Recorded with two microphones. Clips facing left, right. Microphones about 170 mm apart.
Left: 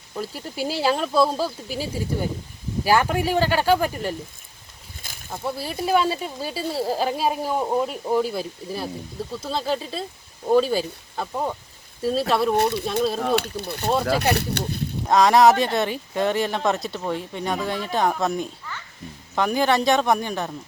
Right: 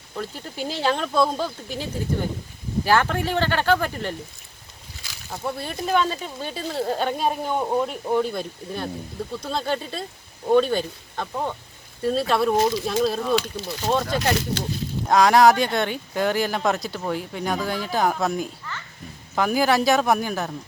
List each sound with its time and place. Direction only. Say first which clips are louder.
0.2 s speech: left 2 dB; 10° left (ahead or behind)
5.3 s speech: left 1 dB; 5° left (ahead or behind)
13.2 s speech: even; 60° left (ahead or behind)
15.1 s speech: even; centre (ahead or behind)